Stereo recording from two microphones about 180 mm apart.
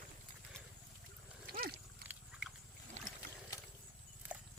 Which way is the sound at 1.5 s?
55° right (ahead or behind).